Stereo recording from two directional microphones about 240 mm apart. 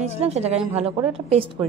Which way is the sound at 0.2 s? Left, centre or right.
Right.